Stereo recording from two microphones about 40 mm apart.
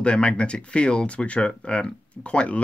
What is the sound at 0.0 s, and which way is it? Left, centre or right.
Speech, left.